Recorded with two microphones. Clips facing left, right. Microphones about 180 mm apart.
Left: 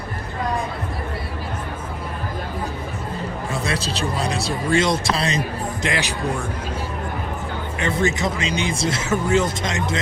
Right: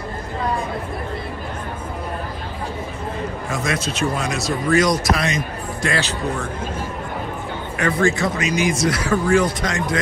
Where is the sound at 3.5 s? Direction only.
35° left (ahead or behind).